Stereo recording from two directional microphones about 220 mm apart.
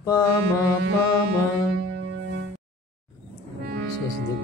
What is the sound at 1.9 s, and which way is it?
Music, 50° right (ahead or behind).